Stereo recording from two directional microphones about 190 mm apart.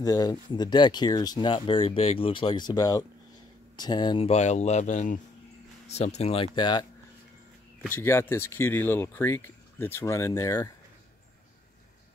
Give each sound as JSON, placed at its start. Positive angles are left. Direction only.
{"t": 0.0, "sound": "speech", "side_deg": 20}
{"t": 7.9, "sound": "speech", "side_deg": 15}